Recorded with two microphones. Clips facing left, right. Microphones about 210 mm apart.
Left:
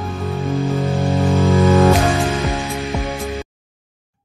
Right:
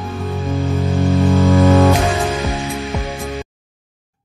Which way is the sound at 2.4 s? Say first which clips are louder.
Even; centre (ahead or behind).